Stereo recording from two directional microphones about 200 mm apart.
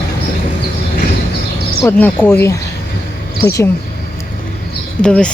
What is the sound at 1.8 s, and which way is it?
A woman's voice, 10° left (ahead or behind).